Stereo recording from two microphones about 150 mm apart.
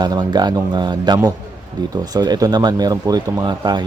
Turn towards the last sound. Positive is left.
turn(degrees=-30)  # may be behind; listen again after turning